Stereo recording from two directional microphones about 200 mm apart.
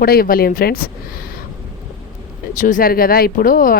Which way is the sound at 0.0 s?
50° left (ahead or behind).